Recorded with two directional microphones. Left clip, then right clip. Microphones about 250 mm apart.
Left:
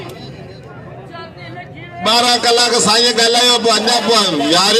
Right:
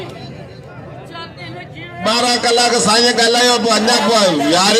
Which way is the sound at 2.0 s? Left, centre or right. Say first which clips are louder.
Left 2 dB; left.